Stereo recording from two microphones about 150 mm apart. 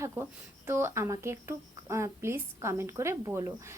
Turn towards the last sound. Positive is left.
turn(degrees=-20)  # may be behind; listen again after turning